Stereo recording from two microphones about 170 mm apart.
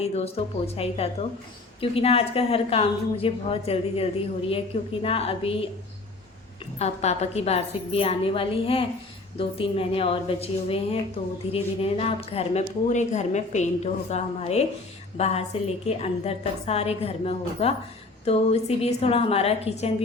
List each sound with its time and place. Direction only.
0.0 s a woman's voice: 40° left (ahead or behind)
6.7 s a woman's voice: 40° left (ahead or behind)